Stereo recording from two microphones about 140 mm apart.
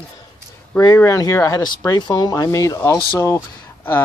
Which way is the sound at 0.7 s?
25° left (ahead or behind).